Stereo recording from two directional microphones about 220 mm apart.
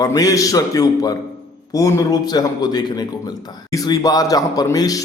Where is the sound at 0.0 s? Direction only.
15° left (ahead or behind).